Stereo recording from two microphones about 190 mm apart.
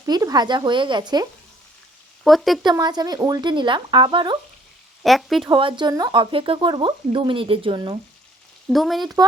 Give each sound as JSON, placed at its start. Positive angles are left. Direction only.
{"t": 0.0, "sound": "speech", "side_deg": -20}
{"t": 2.2, "sound": "speech", "side_deg": 0}
{"t": 2.6, "sound": "speech", "side_deg": -20}
{"t": 5.0, "sound": "speech", "side_deg": 0}
{"t": 5.5, "sound": "speech", "side_deg": -25}
{"t": 8.7, "sound": "speech", "side_deg": 0}